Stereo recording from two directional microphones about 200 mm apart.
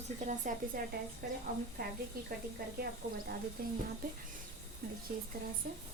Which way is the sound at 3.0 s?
55° right (ahead or behind).